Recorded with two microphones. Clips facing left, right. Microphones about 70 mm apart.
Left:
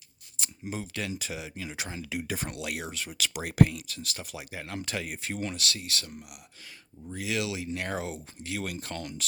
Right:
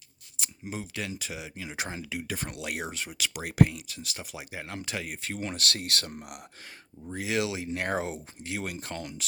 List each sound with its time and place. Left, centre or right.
0.3 s speech: centre
1.7 s speech: right
2.0 s speech: centre
2.6 s speech: right
3.1 s speech: centre
4.8 s speech: centre
5.1 s speech: centre
5.5 s speech: right
7.1 s speech: right; by 9.2 s centre